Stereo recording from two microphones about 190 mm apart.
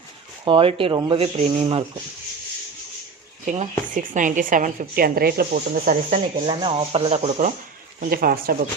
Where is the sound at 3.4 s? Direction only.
40° right (ahead or behind).